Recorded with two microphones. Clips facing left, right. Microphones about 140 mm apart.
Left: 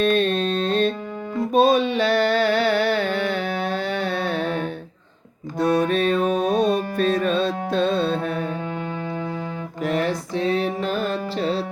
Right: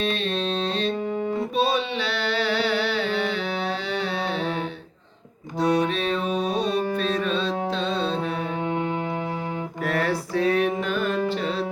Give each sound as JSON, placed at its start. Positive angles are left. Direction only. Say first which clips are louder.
{"t": 0.0, "sound": "mantra", "louder": "left 6 dB", "side_deg": 50}
{"t": 1.5, "sound": "a sound", "louder": "left 9 dB", "side_deg": 45}
{"t": 5.5, "sound": "music", "louder": "left 3 dB", "side_deg": 50}
{"t": 9.8, "sound": "music", "louder": "left 2 dB", "side_deg": 20}